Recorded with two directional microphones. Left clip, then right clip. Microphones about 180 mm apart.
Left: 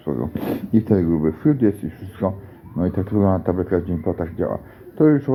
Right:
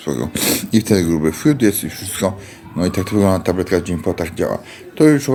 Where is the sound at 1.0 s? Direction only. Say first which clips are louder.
Right 3 dB; 25° right (ahead or behind).